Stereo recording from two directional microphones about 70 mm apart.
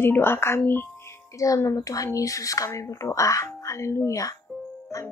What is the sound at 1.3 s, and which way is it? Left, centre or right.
Speech, left.